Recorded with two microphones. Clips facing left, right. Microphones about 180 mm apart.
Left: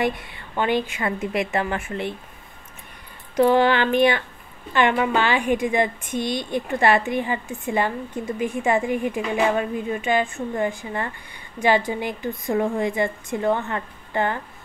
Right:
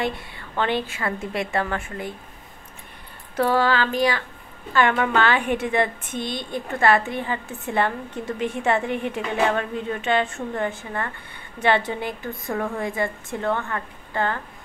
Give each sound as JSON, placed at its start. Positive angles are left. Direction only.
{"t": 0.6, "sound": "a woman's voice", "side_deg": 15}
{"t": 3.3, "sound": "a woman's voice", "side_deg": 20}
{"t": 4.7, "sound": "a woman's voice", "side_deg": 15}